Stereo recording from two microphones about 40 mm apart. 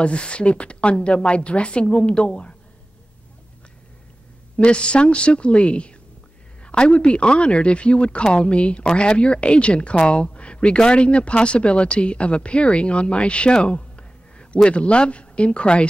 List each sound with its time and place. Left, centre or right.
0.0 s speech: left
4.6 s speech: left